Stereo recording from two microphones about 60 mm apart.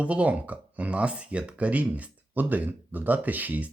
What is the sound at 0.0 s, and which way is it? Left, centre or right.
Speech, right.